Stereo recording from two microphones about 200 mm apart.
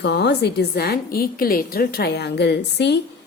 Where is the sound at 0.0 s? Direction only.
60° left (ahead or behind).